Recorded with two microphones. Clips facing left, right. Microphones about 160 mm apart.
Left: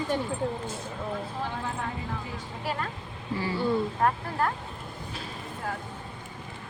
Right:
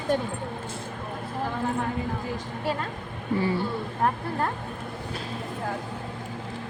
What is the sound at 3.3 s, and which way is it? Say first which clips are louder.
Speech: right 6 dB; 55° right (ahead or behind).